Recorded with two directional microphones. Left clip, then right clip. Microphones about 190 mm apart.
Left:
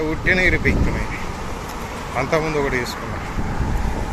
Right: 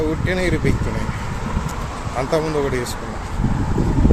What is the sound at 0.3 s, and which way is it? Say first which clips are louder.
Speech: left 9 dB; 20° right (ahead or behind).